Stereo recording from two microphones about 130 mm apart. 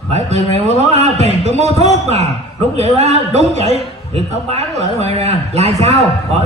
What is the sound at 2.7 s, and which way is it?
A man's voice, 55° right (ahead or behind).